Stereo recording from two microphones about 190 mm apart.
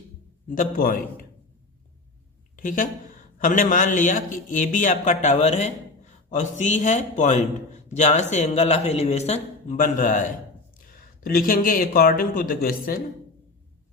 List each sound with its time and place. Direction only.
0.4 s a man's voice: 45° left (ahead or behind)
2.6 s a man's voice: 45° left (ahead or behind)